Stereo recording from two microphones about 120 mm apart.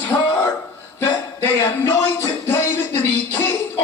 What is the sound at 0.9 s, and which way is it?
Music, 20° left (ahead or behind).